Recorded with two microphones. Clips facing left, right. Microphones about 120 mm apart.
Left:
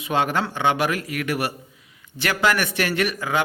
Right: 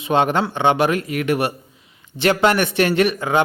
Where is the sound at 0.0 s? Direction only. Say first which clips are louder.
Right 5 dB; 25° right (ahead or behind).